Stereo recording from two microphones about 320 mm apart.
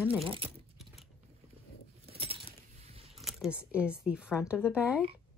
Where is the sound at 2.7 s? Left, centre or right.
Centre.